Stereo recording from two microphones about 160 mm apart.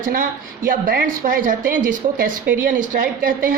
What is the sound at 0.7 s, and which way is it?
A woman's voice, 65° right (ahead or behind).